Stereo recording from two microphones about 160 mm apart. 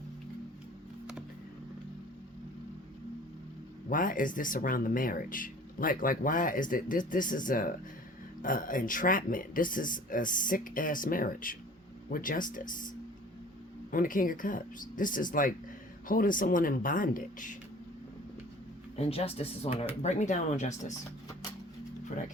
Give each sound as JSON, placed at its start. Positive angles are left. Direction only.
{"t": 3.8, "sound": "speech", "side_deg": 60}
{"t": 13.9, "sound": "speech", "side_deg": 60}
{"t": 18.9, "sound": "speech", "side_deg": 40}